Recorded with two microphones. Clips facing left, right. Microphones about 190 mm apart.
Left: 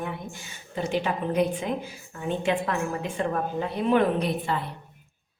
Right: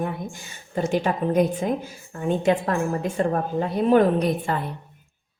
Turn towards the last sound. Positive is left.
turn(degrees=-45)  # may be behind; listen again after turning